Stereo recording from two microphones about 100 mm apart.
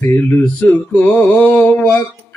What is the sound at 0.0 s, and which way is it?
Mantra, 20° left (ahead or behind).